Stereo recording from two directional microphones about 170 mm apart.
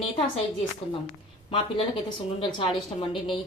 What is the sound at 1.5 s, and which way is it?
A woman's voice, 30° left (ahead or behind).